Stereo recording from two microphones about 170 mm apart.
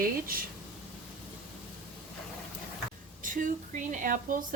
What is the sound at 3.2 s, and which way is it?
A woman's voice, 50° right (ahead or behind).